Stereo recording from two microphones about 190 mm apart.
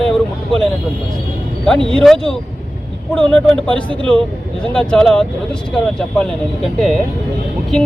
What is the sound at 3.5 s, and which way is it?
Speech, 5° left (ahead or behind).